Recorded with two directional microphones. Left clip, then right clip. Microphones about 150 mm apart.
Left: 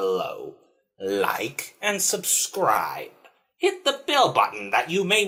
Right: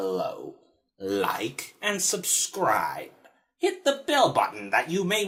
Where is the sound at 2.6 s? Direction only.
30° right (ahead or behind).